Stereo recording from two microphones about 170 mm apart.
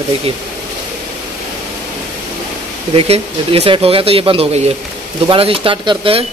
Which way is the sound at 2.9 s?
35° right (ahead or behind).